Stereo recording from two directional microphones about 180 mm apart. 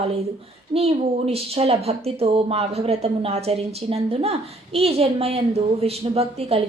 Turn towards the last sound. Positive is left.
turn(degrees=-35)  # may be behind; listen again after turning